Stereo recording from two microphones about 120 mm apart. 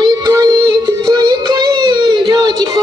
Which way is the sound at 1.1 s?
35° right (ahead or behind).